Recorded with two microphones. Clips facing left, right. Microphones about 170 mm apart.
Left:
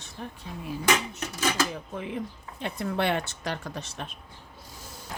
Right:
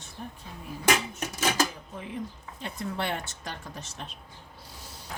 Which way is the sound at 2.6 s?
65° left (ahead or behind).